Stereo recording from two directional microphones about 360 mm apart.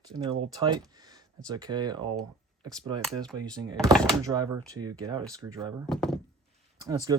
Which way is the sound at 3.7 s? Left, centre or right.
Centre.